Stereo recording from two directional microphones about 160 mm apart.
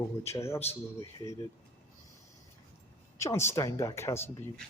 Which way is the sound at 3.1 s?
15° left (ahead or behind).